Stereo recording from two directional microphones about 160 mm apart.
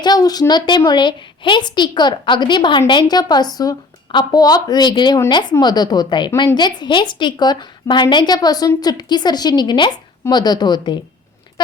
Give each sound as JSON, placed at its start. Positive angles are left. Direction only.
{"t": 0.0, "sound": "a woman's voice", "side_deg": 25}